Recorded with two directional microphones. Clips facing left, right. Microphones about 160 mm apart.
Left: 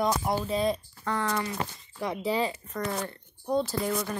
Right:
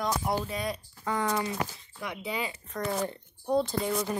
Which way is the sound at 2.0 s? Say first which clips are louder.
Left 6 dB; 35° left (ahead or behind).